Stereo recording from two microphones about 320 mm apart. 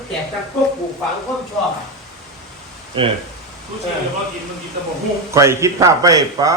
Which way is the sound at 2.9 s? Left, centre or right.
Centre.